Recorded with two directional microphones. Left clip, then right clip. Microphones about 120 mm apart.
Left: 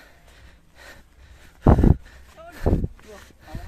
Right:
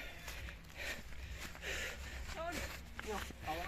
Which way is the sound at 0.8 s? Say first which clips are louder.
Right 1 dB; 55° left (ahead or behind).